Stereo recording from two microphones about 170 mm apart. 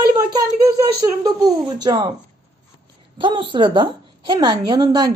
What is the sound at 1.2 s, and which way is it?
Speech, 25° right (ahead or behind).